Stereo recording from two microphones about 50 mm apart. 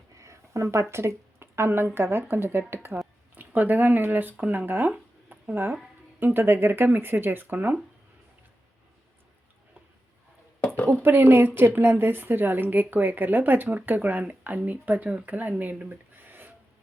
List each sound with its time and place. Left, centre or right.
0.2 s a sound: right
2.0 s speech: right
3.3 s a woman's voice: right
6.1 s speech: right
11.0 s a woman's voice: right
15.9 s a sound: right